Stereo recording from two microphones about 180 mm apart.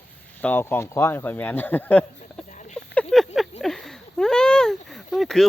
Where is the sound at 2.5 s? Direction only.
45° left (ahead or behind).